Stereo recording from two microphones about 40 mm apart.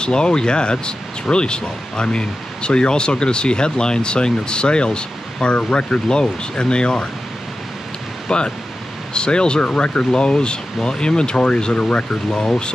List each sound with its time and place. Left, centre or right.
0.0 s speech: left
8.3 s speech: centre